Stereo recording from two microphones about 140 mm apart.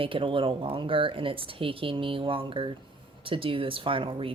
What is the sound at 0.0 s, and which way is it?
A woman's voice, 40° right (ahead or behind).